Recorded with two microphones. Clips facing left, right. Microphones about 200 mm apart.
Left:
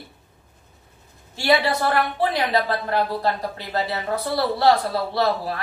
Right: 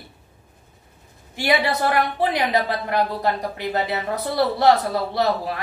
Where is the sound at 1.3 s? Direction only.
20° right (ahead or behind).